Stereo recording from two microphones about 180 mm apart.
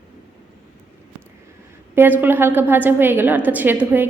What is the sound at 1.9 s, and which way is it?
A woman's voice, 10° right (ahead or behind).